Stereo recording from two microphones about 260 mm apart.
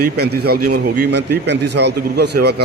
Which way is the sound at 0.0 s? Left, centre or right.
Right.